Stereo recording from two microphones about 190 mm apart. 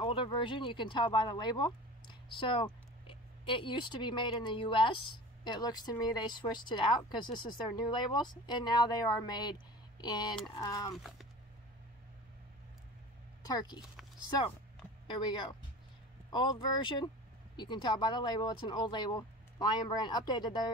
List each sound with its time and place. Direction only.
0.0 s speech: 25° left (ahead or behind)
11.0 s a sound: centre (ahead or behind)
13.5 s speech: 20° left (ahead or behind)
15.0 s speech: 25° left (ahead or behind)